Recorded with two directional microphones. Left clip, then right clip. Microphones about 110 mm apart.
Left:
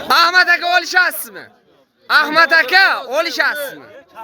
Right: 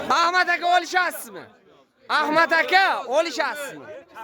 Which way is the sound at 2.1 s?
20° right (ahead or behind).